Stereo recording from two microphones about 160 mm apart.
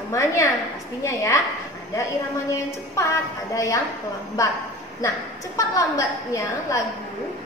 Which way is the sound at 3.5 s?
20° left (ahead or behind).